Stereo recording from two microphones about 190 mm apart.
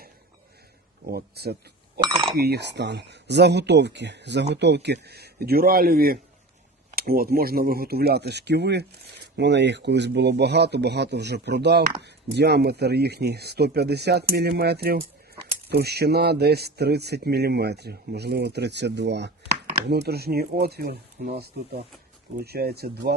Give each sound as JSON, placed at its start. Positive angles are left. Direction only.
{"t": 1.0, "sound": "speech", "side_deg": -55}